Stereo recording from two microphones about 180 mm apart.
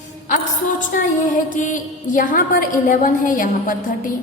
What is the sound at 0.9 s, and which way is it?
A woman's voice, 45° left (ahead or behind).